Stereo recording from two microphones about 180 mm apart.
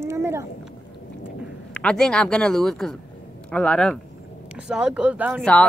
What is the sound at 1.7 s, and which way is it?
Speech, 5° left (ahead or behind).